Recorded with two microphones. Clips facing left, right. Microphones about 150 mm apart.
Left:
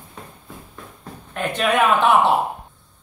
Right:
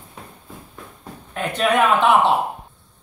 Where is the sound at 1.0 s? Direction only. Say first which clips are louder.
Left 1 dB; centre (ahead or behind).